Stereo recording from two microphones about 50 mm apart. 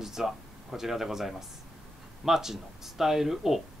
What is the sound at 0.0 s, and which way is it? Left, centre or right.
Speech, centre.